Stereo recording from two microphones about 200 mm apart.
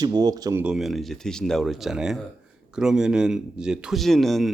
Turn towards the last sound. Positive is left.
turn(degrees=0)  # may be behind; listen again after turning